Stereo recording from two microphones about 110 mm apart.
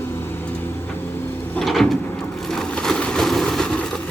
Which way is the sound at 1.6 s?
Centre (ahead or behind).